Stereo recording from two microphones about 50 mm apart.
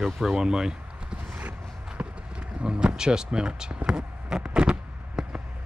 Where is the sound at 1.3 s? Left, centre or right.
Right.